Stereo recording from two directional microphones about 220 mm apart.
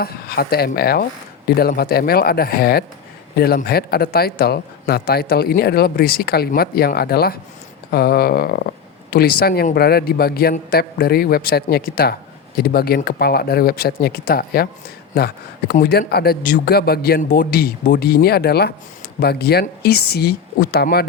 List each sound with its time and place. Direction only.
0.0 s speech: 45° left (ahead or behind)